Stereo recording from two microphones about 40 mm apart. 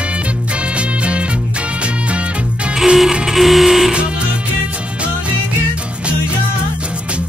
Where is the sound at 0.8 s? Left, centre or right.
Right.